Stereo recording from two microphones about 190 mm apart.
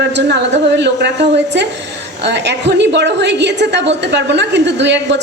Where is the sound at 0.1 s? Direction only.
65° right (ahead or behind).